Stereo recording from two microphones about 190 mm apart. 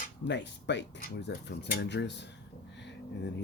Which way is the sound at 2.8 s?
65° left (ahead or behind).